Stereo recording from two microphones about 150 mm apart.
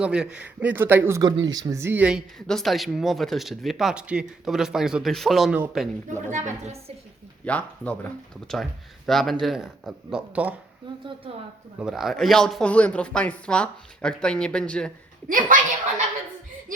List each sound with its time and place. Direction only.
0.0 s a man's voice: 5° right (ahead or behind)
1.2 s speech: 25° right (ahead or behind); by 5.9 s centre (ahead or behind)
6.3 s a woman's voice: 50° right (ahead or behind)
7.4 s speech: 10° left (ahead or behind); by 10.5 s 10° right (ahead or behind)
10.9 s a woman's voice: 35° right (ahead or behind)
11.8 s speech: 5° right (ahead or behind)
15.3 s speech: 65° right (ahead or behind)